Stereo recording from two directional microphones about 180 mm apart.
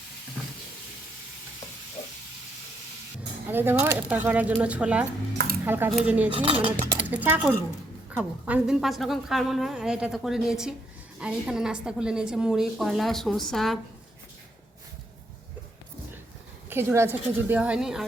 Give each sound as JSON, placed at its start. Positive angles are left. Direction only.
{"t": 3.5, "sound": "a woman's voice", "side_deg": -10}
{"t": 6.3, "sound": "cutlery", "side_deg": -30}
{"t": 6.8, "sound": "a woman's voice", "side_deg": -10}
{"t": 16.6, "sound": "a woman's voice", "side_deg": -15}